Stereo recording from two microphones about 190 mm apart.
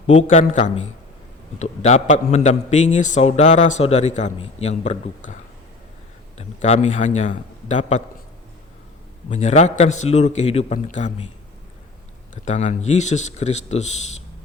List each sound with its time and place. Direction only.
0.1 s a man's voice: 40° left (ahead or behind)
9.3 s a man's voice: 35° left (ahead or behind)
12.5 s a man's voice: 35° left (ahead or behind)